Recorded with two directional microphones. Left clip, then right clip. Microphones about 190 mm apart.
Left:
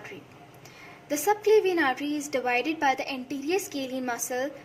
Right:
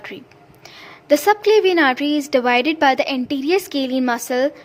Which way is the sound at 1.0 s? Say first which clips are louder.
Right 10 dB; 40° right (ahead or behind).